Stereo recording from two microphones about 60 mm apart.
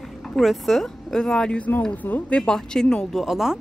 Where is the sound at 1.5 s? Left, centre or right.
Left.